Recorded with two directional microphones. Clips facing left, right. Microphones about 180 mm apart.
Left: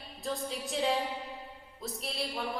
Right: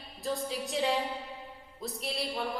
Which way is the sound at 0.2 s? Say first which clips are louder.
Right 2 dB; centre (ahead or behind).